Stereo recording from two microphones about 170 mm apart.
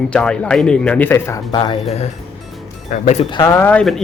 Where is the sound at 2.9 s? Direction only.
40° left (ahead or behind).